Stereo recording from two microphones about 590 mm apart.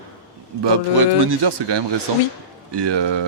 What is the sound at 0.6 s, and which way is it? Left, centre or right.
Speech, right.